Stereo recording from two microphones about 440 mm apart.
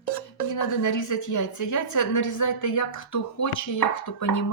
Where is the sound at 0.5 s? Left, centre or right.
Left.